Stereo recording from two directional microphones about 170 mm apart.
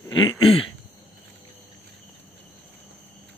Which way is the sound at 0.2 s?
30° left (ahead or behind).